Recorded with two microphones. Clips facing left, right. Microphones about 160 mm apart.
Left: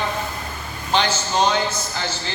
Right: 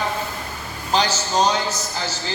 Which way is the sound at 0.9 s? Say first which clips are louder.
Even; 35° right (ahead or behind).